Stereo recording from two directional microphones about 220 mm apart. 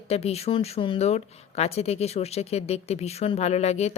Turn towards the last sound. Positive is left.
turn(degrees=30)  # may be behind; listen again after turning